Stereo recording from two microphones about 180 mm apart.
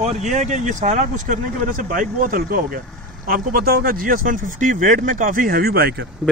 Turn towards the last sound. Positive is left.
turn(degrees=-60)  # may be behind; listen again after turning